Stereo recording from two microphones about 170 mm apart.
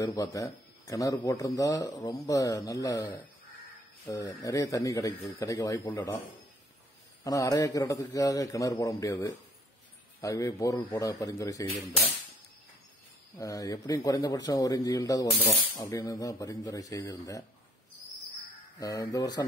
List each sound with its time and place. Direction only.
0.0 s a man's voice: 20° left (ahead or behind)
4.2 s a man's voice: 20° left (ahead or behind)
7.2 s a man's voice: 20° left (ahead or behind)
13.4 s a man's voice: 20° left (ahead or behind)
18.8 s a man's voice: 20° left (ahead or behind)